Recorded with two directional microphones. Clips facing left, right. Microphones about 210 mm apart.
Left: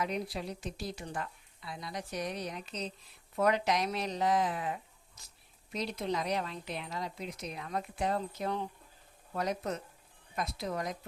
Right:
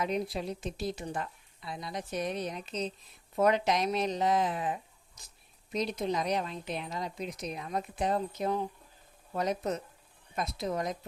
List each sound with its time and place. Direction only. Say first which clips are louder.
0.0 s a woman's voice: right 3 dB; 20° right (ahead or behind)